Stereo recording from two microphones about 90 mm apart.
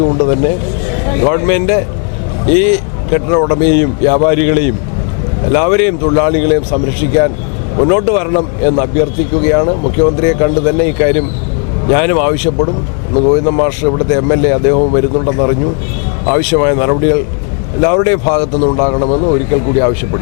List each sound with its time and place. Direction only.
0.0 s a man's voice: 25° left (ahead or behind)